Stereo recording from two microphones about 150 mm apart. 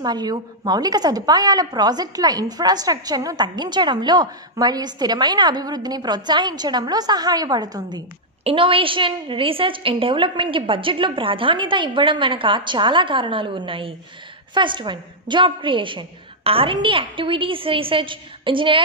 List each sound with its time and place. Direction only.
0.0 s a woman's voice: 30° right (ahead or behind)